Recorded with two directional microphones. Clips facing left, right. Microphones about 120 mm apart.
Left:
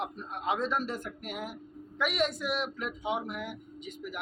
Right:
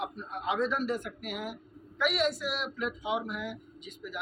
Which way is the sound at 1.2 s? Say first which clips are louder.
Even; 40° left (ahead or behind).